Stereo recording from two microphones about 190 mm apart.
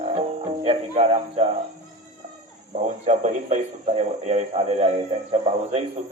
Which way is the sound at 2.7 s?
35° right (ahead or behind).